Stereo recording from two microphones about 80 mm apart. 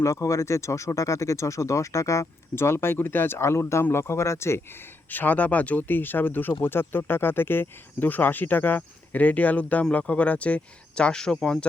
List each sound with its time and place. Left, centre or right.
0.0 s speech: left
5.0 s speech: left; by 11.6 s centre